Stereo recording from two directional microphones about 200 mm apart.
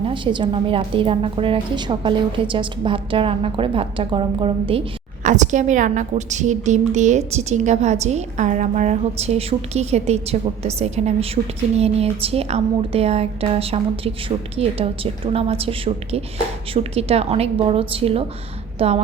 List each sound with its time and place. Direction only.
0.0 s a woman's voice: 25° right (ahead or behind)
5.2 s a woman's voice: 35° right (ahead or behind)